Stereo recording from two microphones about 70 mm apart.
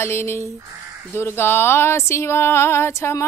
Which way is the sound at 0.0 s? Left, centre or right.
Left.